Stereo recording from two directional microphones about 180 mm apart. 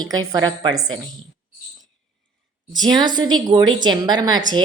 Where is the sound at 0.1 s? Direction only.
20° right (ahead or behind).